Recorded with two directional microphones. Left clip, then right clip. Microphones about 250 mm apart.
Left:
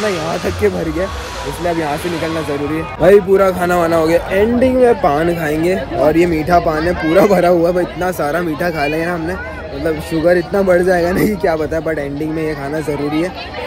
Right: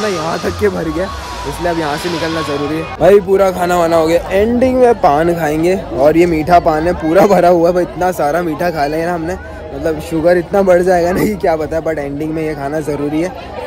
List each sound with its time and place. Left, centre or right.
3.0 s speech: centre